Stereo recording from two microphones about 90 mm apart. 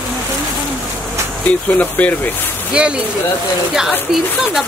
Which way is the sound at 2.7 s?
10° right (ahead or behind).